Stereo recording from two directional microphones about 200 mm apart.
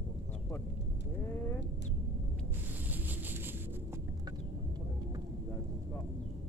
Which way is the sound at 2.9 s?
10° right (ahead or behind).